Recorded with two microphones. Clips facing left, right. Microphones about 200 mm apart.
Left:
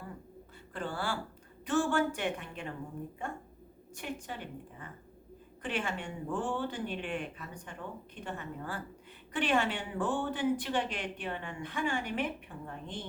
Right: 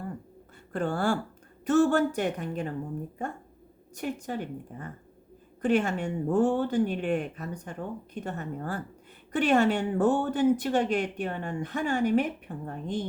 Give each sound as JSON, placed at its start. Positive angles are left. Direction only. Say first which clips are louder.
{"t": 0.7, "sound": "a woman's voice", "louder": "right 9 dB", "side_deg": -45}